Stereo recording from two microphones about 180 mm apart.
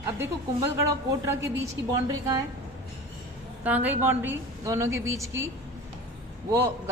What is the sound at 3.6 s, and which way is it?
A woman's voice, 10° right (ahead or behind).